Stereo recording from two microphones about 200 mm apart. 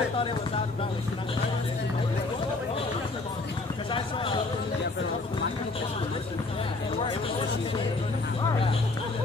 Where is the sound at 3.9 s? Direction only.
25° left (ahead or behind).